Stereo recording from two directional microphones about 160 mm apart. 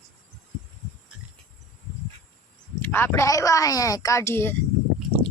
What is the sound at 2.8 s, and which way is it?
Speech, 15° left (ahead or behind).